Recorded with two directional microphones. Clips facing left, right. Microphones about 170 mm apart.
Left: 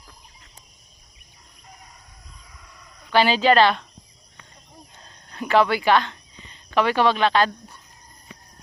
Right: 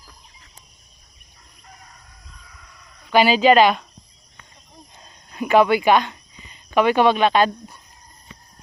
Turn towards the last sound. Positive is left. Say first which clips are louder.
# right 3 dB
turn(degrees=-15)  # may be behind; listen again after turning